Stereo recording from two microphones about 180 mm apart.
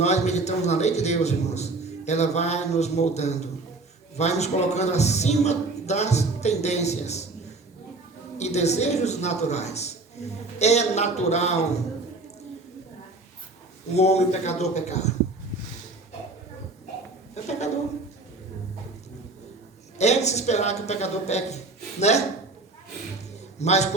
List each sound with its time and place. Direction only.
0.0 s a man's voice: 40° left (ahead or behind)
8.4 s a man's voice: 40° left (ahead or behind)
13.9 s a man's voice: 35° left (ahead or behind)
17.3 s a woman's voice: 40° left (ahead or behind)
20.0 s a man's voice: 40° left (ahead or behind)
23.6 s a man's voice: 40° left (ahead or behind)